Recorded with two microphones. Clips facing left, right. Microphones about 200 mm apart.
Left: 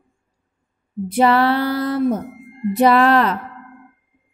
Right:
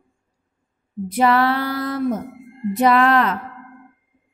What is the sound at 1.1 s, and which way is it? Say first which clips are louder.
Female singing: left 2 dB; 30° left (ahead or behind).